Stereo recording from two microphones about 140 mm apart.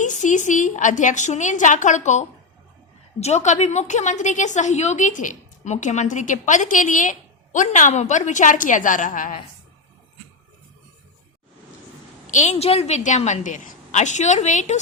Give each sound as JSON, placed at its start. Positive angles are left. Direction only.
{"t": 0.0, "sound": "a woman's voice", "side_deg": 60}
{"t": 12.3, "sound": "a woman's voice", "side_deg": 60}